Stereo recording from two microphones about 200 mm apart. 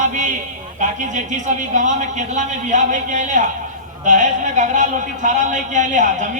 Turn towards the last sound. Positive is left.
turn(degrees=-40)  # may be behind; listen again after turning